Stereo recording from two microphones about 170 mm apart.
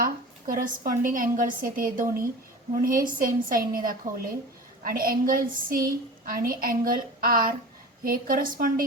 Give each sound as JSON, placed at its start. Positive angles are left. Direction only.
{"t": 0.0, "sound": "a woman's voice", "side_deg": -55}